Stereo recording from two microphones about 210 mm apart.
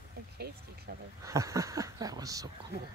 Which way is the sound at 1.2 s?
15° right (ahead or behind).